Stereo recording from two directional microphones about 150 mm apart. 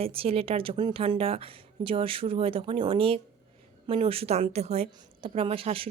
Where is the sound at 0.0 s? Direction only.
40° right (ahead or behind).